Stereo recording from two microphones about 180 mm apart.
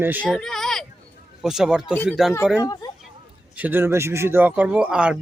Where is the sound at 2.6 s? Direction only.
20° left (ahead or behind).